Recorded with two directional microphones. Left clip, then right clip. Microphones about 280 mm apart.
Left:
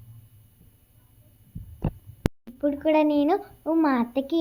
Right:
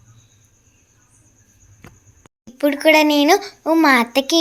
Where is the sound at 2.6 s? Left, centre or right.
Right.